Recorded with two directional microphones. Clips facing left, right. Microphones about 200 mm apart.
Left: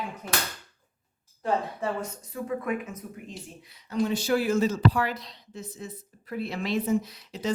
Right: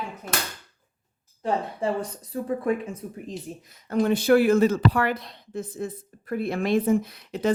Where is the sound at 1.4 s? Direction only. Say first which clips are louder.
Right 2 dB; 30° right (ahead or behind).